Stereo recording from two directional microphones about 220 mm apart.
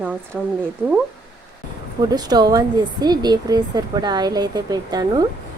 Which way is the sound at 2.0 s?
15° right (ahead or behind).